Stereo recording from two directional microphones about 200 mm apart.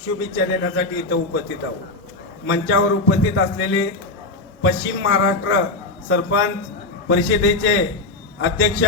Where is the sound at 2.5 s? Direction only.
65° left (ahead or behind).